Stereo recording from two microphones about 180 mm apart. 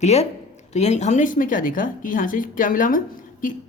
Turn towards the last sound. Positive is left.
turn(degrees=50)  # may be behind; listen again after turning